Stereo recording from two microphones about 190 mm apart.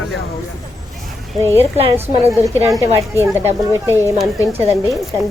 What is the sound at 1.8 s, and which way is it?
Speech, 30° right (ahead or behind).